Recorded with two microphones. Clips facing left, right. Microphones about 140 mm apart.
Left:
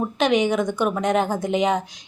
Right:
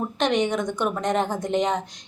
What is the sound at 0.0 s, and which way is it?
A woman's voice, 5° left (ahead or behind).